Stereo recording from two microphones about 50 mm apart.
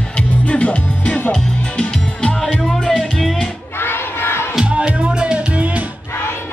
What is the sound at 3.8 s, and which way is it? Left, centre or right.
Crowd, left.